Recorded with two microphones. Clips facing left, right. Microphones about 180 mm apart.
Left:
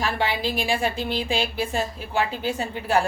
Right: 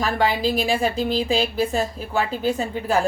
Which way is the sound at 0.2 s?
40° right (ahead or behind).